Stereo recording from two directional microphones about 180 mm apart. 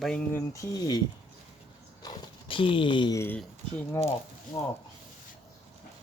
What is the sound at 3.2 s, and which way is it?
Speech, 10° left (ahead or behind).